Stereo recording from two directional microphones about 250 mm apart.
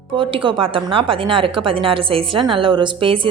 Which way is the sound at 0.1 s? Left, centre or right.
Centre.